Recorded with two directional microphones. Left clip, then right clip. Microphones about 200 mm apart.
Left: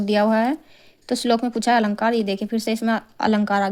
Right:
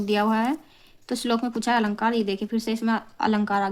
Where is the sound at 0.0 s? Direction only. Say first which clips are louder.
Left 4 dB; 25° left (ahead or behind).